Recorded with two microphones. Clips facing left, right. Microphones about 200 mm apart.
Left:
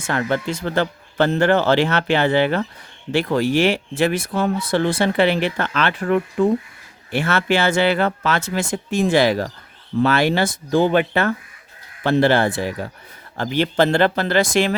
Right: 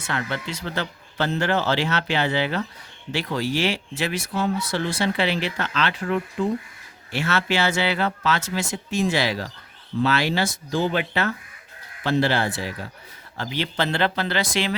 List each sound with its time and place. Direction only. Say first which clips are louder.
0.0 s speech: left 7 dB; 45° left (ahead or behind)